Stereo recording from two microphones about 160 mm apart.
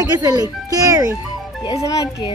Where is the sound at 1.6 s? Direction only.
25° left (ahead or behind).